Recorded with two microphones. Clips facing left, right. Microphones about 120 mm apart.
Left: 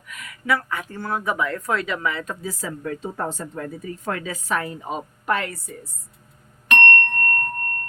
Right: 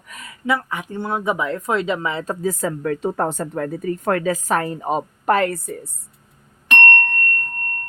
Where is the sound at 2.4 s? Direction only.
50° right (ahead or behind).